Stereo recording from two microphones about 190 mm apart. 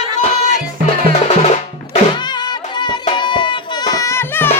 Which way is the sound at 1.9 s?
25° left (ahead or behind).